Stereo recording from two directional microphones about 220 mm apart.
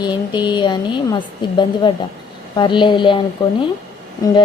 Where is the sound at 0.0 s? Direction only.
20° left (ahead or behind).